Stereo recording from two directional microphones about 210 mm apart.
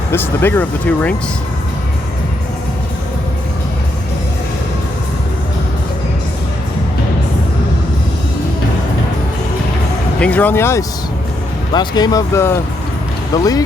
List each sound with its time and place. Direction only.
0.1 s speech: 10° left (ahead or behind)
10.2 s speech: 5° left (ahead or behind)